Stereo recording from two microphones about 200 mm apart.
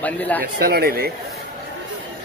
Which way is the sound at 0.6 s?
50° right (ahead or behind).